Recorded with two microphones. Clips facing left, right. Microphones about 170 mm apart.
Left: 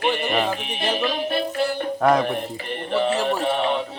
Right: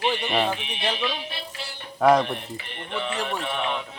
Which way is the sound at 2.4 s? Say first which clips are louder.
Left 8 dB; 45° left (ahead or behind).